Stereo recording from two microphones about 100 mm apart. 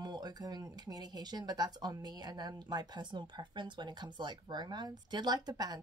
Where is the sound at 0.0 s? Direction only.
45° right (ahead or behind).